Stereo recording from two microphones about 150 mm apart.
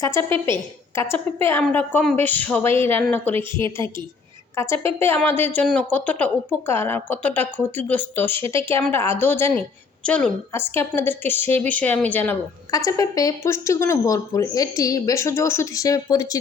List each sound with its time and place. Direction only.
0.0 s a woman's voice: 15° left (ahead or behind)
4.5 s a woman's voice: 15° left (ahead or behind)
12.7 s speech: 25° left (ahead or behind)